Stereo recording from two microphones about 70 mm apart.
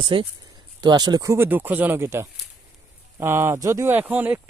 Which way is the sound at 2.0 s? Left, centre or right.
Right.